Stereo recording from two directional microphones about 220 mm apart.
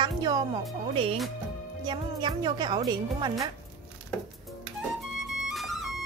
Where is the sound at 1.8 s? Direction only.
20° right (ahead or behind).